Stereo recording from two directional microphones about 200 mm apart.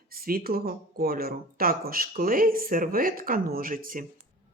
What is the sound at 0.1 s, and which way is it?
Speech, 45° right (ahead or behind).